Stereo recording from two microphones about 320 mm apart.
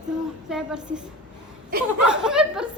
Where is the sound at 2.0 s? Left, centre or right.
Centre.